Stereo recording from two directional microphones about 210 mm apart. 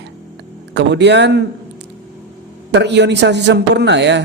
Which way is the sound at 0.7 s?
55° right (ahead or behind).